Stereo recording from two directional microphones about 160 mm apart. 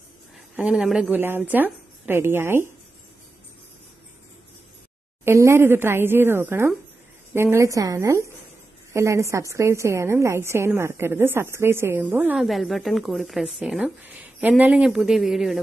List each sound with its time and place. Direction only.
0.6 s a woman's voice: 10° right (ahead or behind)
5.2 s a woman's voice: 15° right (ahead or behind)
12.4 s a woman's voice: centre (ahead or behind)